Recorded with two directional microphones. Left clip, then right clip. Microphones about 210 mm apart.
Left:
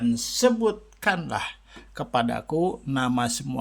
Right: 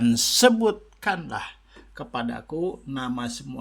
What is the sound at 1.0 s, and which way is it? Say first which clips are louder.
Speech: left 2 dB; 15° left (ahead or behind).